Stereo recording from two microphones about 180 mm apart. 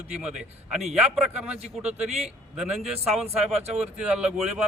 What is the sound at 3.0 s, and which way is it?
Speech, centre (ahead or behind).